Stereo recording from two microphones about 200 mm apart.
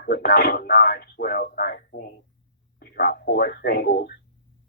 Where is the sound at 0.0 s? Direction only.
50° left (ahead or behind).